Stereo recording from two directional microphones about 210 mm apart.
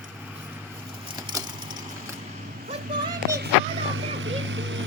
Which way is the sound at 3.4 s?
60° right (ahead or behind).